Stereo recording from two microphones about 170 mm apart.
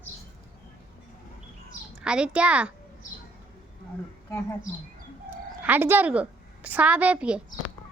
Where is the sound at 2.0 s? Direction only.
5° right (ahead or behind).